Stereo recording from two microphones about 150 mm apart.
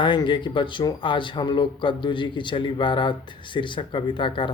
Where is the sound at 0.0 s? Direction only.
30° left (ahead or behind).